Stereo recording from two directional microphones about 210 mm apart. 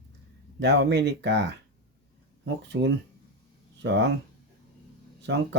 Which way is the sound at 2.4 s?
55° right (ahead or behind).